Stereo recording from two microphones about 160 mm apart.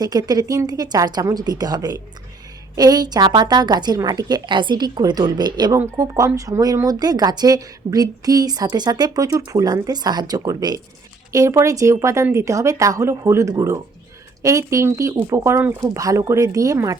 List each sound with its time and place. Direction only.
0.0 s speech: 25° right (ahead or behind)